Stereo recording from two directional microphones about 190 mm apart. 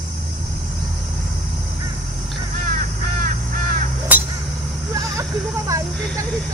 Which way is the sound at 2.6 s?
50° right (ahead or behind).